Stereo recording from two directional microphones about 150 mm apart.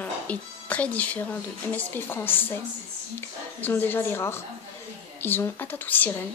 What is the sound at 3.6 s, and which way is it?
A woman's voice, 10° left (ahead or behind).